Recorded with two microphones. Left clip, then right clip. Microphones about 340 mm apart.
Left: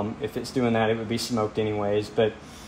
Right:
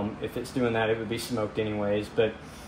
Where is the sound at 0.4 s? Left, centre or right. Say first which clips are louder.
Left 3 dB; left.